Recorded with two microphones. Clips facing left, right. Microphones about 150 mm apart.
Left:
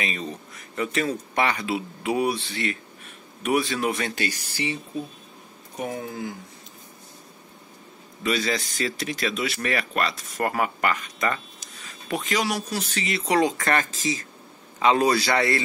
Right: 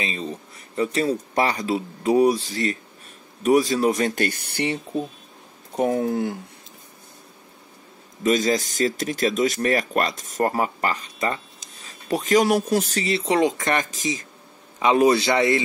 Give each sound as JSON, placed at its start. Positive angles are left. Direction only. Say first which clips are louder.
{"t": 0.0, "sound": "speech", "louder": "right 2 dB", "side_deg": -30}
{"t": 8.2, "sound": "speech", "louder": "right 5 dB", "side_deg": -45}
{"t": 10.5, "sound": "speech", "louder": "right 1 dB", "side_deg": -30}
{"t": 12.1, "sound": "speech", "louder": "right 7 dB", "side_deg": -40}